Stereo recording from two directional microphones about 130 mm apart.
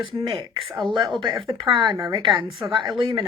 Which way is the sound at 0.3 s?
35° right (ahead or behind).